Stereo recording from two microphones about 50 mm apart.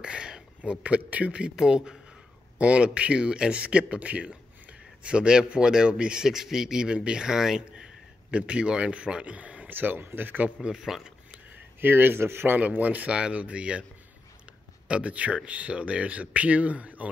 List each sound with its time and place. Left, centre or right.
0.0 s a sound: centre
0.6 s speech: right
1.6 s speech: centre
9.8 s speech: right
10.7 s speech: centre
11.8 s speech: right
12.5 s speech: right
14.9 s speech: right